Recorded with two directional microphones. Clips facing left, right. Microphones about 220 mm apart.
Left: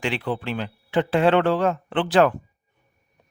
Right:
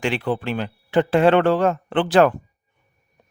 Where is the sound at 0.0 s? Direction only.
45° right (ahead or behind).